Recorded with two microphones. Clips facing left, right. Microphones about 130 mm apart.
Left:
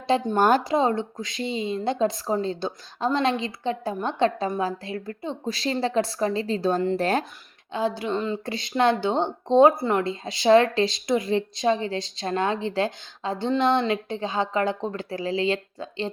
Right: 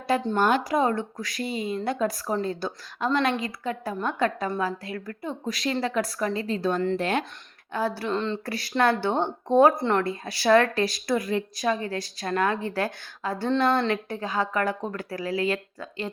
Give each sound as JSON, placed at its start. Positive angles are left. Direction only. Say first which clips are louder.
{"t": 0.1, "sound": "speech", "louder": "left 2 dB", "side_deg": 15}
{"t": 0.3, "sound": "speech", "louder": "left 3 dB", "side_deg": 45}
{"t": 0.6, "sound": "speech", "louder": "left 1 dB", "side_deg": 25}
{"t": 7.7, "sound": "speech", "louder": "left 2 dB", "side_deg": 20}
{"t": 8.1, "sound": "speech", "louder": "left 1 dB", "side_deg": 5}
{"t": 8.4, "sound": "speech", "louder": "left 2 dB", "side_deg": 20}
{"t": 9.7, "sound": "speech", "louder": "even", "side_deg": 5}
{"t": 10.0, "sound": "speech", "louder": "left 1 dB", "side_deg": 20}